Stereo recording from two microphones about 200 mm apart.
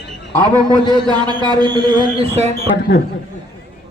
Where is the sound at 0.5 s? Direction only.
20° right (ahead or behind).